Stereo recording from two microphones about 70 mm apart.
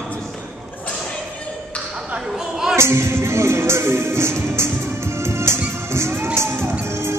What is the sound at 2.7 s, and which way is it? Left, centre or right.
Music, right.